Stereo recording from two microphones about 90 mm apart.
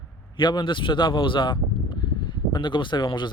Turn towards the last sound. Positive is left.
turn(degrees=60)  # may be behind; listen again after turning